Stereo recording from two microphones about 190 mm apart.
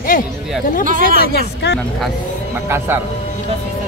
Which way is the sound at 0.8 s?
45° right (ahead or behind).